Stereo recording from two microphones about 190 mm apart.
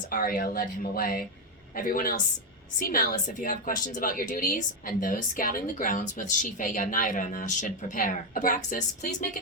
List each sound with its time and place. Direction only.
0.1 s a woman's voice: 50° left (ahead or behind)